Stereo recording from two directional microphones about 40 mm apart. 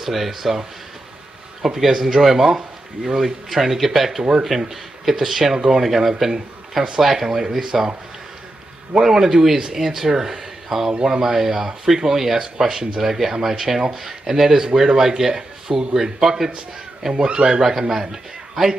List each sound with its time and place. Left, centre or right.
0.0 s speech: centre
1.6 s speech: centre
4.2 s speech: centre
8.9 s speech: centre
16.0 s speech: centre
17.1 s speech: right
17.6 s speech: centre